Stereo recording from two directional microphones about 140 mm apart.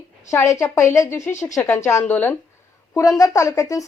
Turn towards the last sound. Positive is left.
turn(degrees=25)  # may be behind; listen again after turning